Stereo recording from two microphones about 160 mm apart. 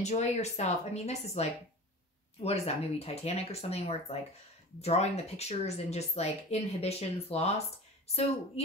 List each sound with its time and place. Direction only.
0.0 s a woman's voice: 45° left (ahead or behind)